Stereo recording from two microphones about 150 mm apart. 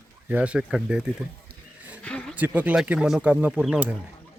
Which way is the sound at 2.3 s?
10° right (ahead or behind).